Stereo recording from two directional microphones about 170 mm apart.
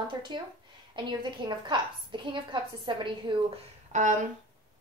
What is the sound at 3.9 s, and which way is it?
Speech, 45° right (ahead or behind).